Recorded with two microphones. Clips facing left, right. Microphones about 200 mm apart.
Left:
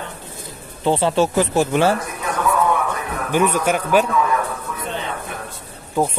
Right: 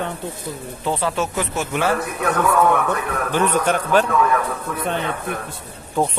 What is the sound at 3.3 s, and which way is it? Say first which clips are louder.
Speech: left 2 dB; 10° left (ahead or behind).